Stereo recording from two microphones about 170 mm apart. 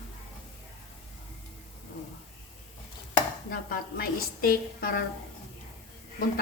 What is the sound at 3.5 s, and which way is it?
A woman's voice, 60° left (ahead or behind).